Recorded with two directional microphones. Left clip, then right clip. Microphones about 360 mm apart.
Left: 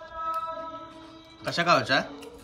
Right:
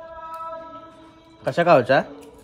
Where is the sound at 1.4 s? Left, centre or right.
Centre.